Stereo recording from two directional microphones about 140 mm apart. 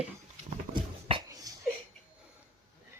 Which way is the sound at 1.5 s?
25° right (ahead or behind).